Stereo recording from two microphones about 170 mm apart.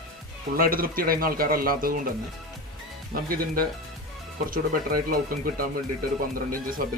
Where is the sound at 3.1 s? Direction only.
55° right (ahead or behind).